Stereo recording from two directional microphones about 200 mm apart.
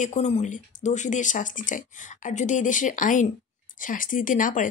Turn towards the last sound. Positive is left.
turn(degrees=40)  # may be behind; listen again after turning